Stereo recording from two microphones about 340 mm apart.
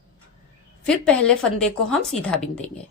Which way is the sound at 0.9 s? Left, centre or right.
Centre.